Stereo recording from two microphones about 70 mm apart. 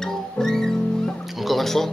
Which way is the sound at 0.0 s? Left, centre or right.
Centre.